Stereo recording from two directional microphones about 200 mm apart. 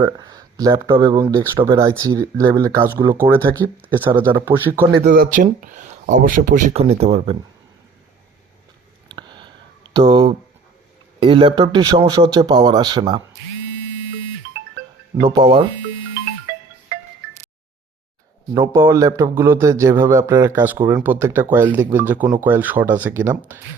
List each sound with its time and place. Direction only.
0.0 s speech: 20° right (ahead or behind)
5.0 s speech: 45° right (ahead or behind)
9.0 s a sound: 20° right (ahead or behind)
11.2 s speech: 25° right (ahead or behind)
15.4 s speech: 25° right (ahead or behind)
18.5 s speech: 15° right (ahead or behind)